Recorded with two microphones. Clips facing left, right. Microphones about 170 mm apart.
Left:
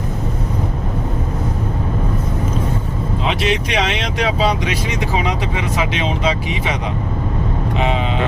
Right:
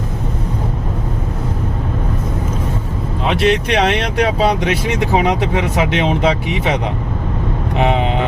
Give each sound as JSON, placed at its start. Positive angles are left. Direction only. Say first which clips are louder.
{"t": 3.2, "sound": "speech", "louder": "right 6 dB", "side_deg": -60}
{"t": 7.8, "sound": "vehicle", "louder": "right 4 dB", "side_deg": -60}